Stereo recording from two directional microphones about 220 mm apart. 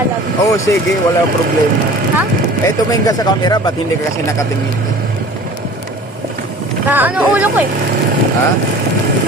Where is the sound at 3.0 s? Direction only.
20° left (ahead or behind).